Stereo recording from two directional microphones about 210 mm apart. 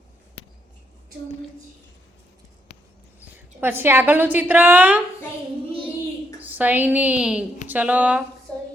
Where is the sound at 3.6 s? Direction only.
10° right (ahead or behind).